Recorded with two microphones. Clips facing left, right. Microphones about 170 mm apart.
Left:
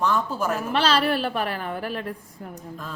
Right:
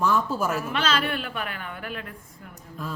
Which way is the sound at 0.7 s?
35° left (ahead or behind).